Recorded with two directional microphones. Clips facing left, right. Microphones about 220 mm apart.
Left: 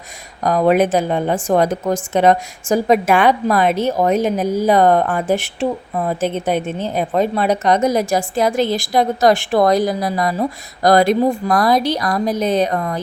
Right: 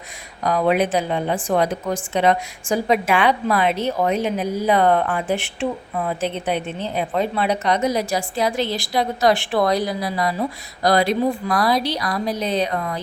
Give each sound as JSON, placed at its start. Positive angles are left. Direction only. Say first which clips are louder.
{"t": 0.4, "sound": "speech", "louder": "left 4 dB", "side_deg": 45}